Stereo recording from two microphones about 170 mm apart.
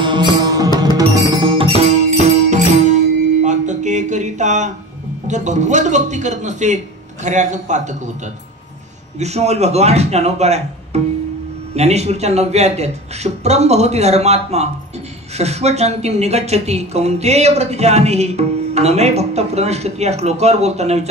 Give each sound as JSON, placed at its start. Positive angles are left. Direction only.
{"t": 0.0, "sound": "music", "side_deg": -25}
{"t": 1.8, "sound": "music", "side_deg": -40}
{"t": 3.4, "sound": "a sound", "side_deg": -45}
{"t": 5.3, "sound": "a man's voice", "side_deg": -45}
{"t": 9.2, "sound": "speech", "side_deg": -40}